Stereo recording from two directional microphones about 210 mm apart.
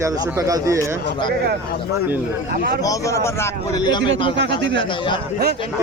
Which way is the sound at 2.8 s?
15° left (ahead or behind).